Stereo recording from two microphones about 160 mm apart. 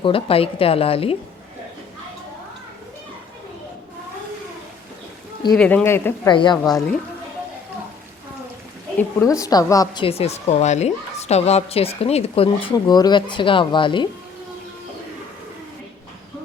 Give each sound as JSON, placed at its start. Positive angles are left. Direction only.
{"t": 0.0, "sound": "a woman's voice", "side_deg": 35}
{"t": 5.5, "sound": "speech", "side_deg": 10}
{"t": 6.2, "sound": "a woman's voice", "side_deg": 30}
{"t": 9.0, "sound": "a woman's voice", "side_deg": 20}